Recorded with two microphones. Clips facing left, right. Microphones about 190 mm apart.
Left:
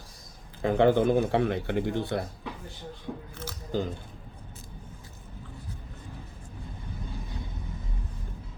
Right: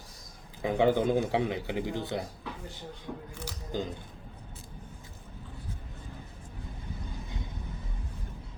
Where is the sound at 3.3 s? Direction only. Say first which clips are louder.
Left 5 dB; 15° right (ahead or behind).